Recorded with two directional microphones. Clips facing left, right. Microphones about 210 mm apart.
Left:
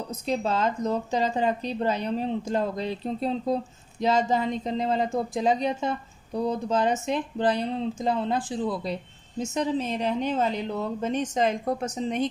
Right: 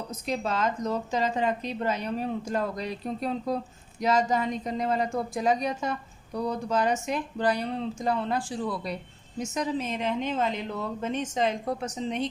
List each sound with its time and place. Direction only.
0.3 s a woman's voice: 30° left (ahead or behind); by 12.3 s 45° left (ahead or behind)